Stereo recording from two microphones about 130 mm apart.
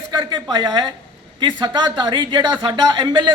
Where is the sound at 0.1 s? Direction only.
35° right (ahead or behind).